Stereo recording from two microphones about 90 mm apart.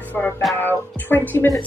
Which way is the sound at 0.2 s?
20° left (ahead or behind).